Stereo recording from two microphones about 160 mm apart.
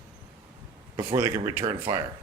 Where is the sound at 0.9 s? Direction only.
25° right (ahead or behind).